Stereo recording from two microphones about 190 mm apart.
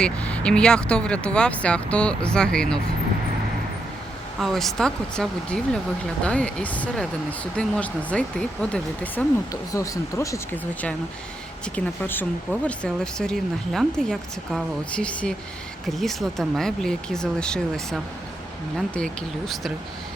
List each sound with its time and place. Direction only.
0.0 s speech: 5° left (ahead or behind)
4.4 s speech: centre (ahead or behind)
9.5 s speech: 15° left (ahead or behind)